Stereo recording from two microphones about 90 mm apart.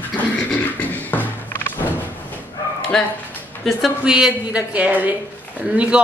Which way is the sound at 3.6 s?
5° right (ahead or behind).